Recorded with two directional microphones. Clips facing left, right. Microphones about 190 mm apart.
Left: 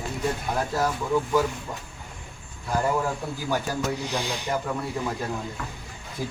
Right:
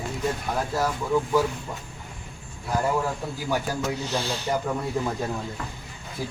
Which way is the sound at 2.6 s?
5° right (ahead or behind).